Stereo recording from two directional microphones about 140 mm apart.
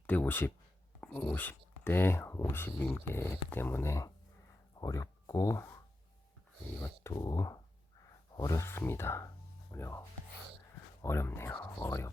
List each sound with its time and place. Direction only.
0.1 s speech: 15° left (ahead or behind)
7.1 s speech: 25° left (ahead or behind)
11.0 s speech: 20° left (ahead or behind)